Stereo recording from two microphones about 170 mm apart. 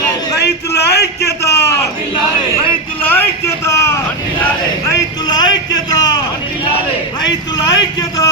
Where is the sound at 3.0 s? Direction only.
10° left (ahead or behind).